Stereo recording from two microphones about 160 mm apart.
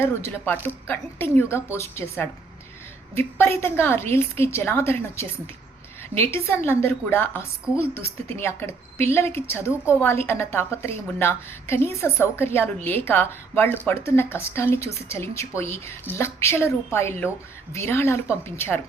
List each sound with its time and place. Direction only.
0.0 s a woman's voice: 15° left (ahead or behind)